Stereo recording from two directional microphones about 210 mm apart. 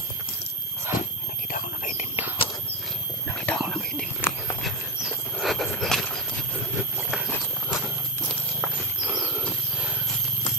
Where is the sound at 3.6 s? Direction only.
5° left (ahead or behind).